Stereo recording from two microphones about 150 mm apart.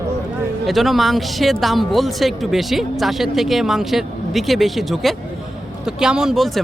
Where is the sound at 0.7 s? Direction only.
Centre (ahead or behind).